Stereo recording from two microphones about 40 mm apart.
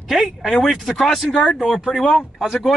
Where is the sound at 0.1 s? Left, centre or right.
Centre.